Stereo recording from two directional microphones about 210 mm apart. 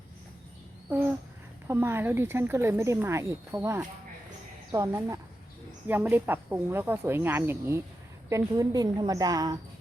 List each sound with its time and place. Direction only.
1.6 s speech: 10° right (ahead or behind)